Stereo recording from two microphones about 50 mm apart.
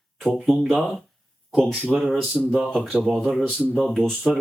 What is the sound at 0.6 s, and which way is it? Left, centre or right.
Speech, centre.